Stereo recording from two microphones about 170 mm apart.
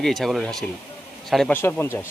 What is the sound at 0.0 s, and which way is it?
A man's voice, centre (ahead or behind).